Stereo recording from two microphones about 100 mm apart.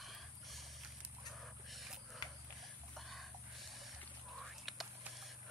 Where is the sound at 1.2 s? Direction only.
Centre (ahead or behind).